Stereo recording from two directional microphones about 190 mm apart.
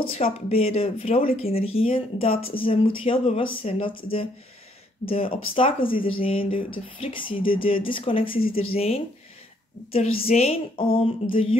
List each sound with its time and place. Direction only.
0.1 s speech: 30° left (ahead or behind)